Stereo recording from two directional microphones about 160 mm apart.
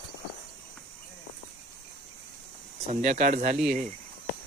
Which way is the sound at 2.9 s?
45° right (ahead or behind).